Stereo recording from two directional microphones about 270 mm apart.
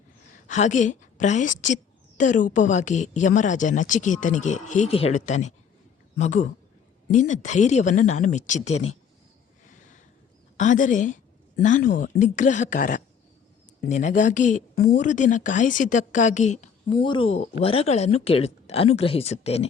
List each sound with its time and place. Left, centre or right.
0.3 s a woman's voice: left
10.6 s speech: left